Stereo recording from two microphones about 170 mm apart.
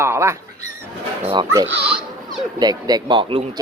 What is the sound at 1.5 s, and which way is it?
Speech, 20° right (ahead or behind).